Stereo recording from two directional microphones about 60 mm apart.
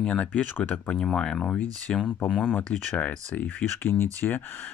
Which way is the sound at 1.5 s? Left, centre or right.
Left.